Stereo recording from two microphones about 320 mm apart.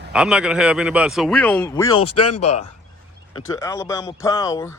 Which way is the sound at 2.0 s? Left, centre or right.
Left.